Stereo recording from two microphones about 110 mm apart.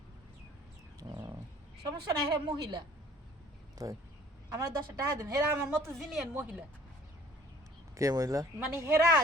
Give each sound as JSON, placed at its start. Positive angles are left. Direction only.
{"t": 0.9, "sound": "bird", "side_deg": -35}
{"t": 1.8, "sound": "a woman's voice", "side_deg": -40}
{"t": 3.8, "sound": "a woman's voice", "side_deg": -35}
{"t": 6.0, "sound": "speech", "side_deg": -5}
{"t": 7.9, "sound": "a woman's voice", "side_deg": -30}